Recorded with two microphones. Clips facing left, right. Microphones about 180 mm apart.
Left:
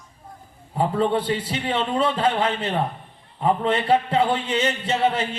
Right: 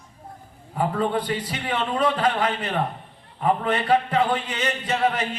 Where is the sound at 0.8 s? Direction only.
25° left (ahead or behind).